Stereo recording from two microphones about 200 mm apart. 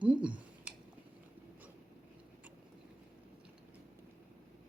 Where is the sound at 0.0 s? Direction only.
5° right (ahead or behind).